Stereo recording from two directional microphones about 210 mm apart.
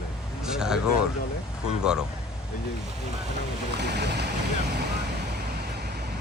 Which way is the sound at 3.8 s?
50° right (ahead or behind).